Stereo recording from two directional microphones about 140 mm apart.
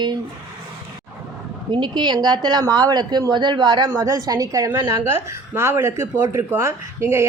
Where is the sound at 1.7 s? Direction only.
35° right (ahead or behind).